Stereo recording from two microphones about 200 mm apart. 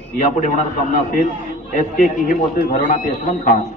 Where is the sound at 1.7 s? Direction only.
40° left (ahead or behind).